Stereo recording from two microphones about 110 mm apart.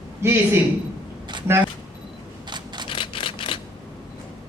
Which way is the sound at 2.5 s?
45° right (ahead or behind).